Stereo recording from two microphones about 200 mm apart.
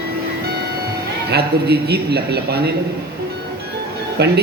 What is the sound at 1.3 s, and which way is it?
A woman's voice, 55° right (ahead or behind).